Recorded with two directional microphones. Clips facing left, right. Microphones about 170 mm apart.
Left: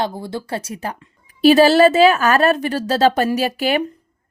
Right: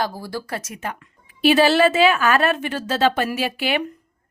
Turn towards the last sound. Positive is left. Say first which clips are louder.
# left 4 dB
turn(degrees=40)  # may be behind; listen again after turning